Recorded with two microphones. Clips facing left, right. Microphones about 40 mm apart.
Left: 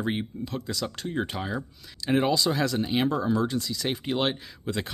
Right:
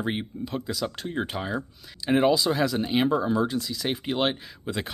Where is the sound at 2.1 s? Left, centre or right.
Centre.